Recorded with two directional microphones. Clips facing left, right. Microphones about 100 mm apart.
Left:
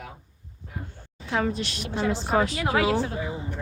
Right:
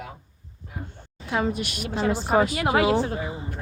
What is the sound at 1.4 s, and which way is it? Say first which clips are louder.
Speech: right 1 dB; 15° right (ahead or behind).